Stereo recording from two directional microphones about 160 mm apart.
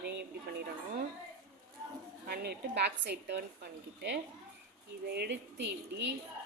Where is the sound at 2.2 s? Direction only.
85° right.